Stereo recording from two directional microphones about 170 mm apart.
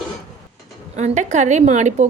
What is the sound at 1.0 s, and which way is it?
Speech, 45° right (ahead or behind).